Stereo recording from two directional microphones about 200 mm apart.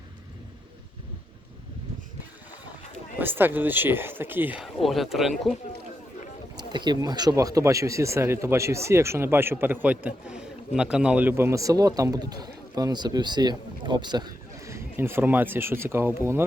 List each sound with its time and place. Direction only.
3.2 s a man's voice: 10° right (ahead or behind)
6.6 s a man's voice: 20° right (ahead or behind)